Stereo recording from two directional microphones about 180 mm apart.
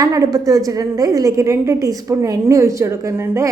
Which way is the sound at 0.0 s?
20° right (ahead or behind).